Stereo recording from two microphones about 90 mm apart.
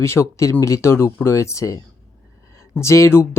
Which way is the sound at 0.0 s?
30° left (ahead or behind).